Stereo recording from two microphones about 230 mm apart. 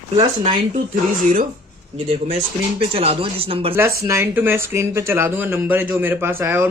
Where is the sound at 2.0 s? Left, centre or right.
Right.